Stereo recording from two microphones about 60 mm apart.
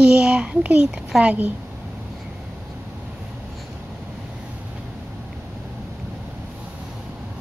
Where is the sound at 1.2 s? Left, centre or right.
Right.